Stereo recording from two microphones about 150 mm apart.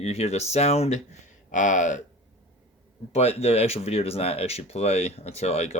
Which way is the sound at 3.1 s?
45° left (ahead or behind).